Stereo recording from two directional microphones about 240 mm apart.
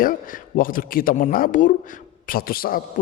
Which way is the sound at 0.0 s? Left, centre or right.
Left.